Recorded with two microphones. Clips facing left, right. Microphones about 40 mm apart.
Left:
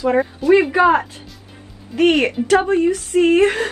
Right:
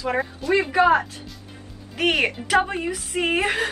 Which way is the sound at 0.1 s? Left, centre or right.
Centre.